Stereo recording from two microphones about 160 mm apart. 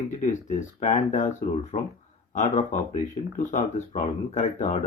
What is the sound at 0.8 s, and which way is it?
Speech, 45° left (ahead or behind).